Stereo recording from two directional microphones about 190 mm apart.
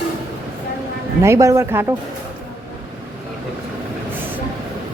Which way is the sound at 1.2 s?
15° right (ahead or behind).